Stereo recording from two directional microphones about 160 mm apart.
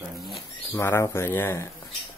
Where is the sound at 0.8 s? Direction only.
15° left (ahead or behind).